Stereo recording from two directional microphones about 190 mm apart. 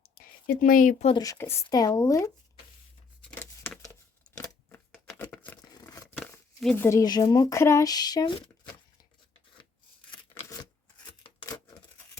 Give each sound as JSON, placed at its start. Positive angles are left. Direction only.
{"t": 0.0, "sound": "a sound", "side_deg": 50}
{"t": 1.1, "sound": "speech", "side_deg": 20}
{"t": 3.2, "sound": "tearing", "side_deg": 5}
{"t": 4.4, "sound": "shuffling cards", "side_deg": 10}
{"t": 6.1, "sound": "a sound", "side_deg": 5}
{"t": 6.8, "sound": "speech", "side_deg": 20}
{"t": 10.1, "sound": "scissors", "side_deg": 20}